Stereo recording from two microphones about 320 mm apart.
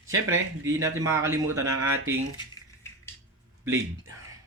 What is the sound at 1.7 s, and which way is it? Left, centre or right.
Speech, right.